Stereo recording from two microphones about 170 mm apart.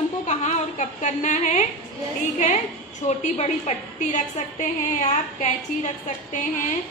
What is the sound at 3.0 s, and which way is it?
A woman's voice, 40° left (ahead or behind).